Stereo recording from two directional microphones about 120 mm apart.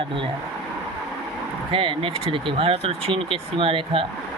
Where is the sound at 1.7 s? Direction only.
45° right (ahead or behind).